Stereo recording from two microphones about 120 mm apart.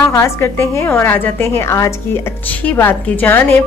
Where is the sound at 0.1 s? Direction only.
20° left (ahead or behind).